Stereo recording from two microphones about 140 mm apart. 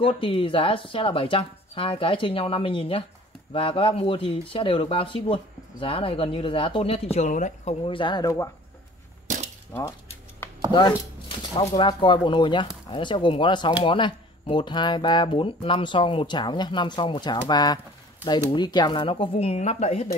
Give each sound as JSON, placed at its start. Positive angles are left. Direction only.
{"t": 0.0, "sound": "speech", "side_deg": 40}
{"t": 7.8, "sound": "speech", "side_deg": 35}
{"t": 9.3, "sound": "cap gun", "side_deg": -65}
{"t": 9.7, "sound": "speech", "side_deg": 15}
{"t": 10.7, "sound": "speech", "side_deg": 30}